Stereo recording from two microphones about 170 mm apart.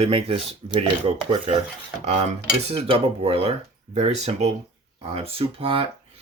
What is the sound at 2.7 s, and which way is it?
Speech, 35° right (ahead or behind).